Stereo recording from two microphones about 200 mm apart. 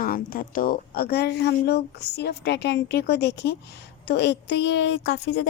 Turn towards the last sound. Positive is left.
turn(degrees=60)  # may be behind; listen again after turning